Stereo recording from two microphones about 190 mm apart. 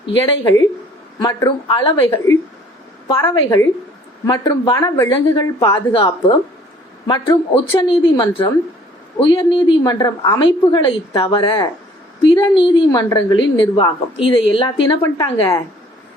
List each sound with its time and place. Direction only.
0.0 s a woman's voice: 25° left (ahead or behind)
2.0 s a woman's voice: 15° left (ahead or behind)